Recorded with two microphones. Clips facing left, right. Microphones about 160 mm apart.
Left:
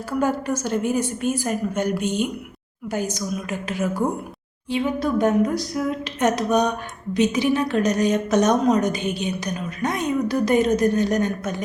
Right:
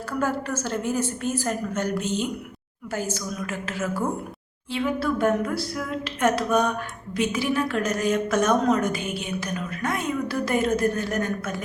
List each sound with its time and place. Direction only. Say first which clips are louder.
0.2 s a woman's voice: left 4 dB; 15° left (ahead or behind)